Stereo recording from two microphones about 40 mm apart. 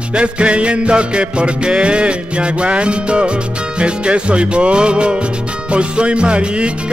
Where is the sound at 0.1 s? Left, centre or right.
Right.